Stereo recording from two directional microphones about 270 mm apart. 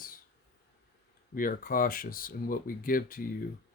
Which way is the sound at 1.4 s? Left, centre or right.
Left.